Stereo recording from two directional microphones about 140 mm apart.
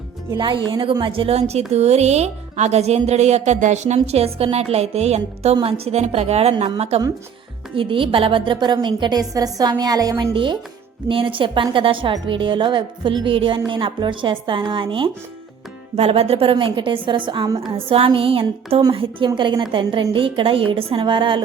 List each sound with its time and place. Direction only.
0.3 s a woman's voice: 35° right (ahead or behind)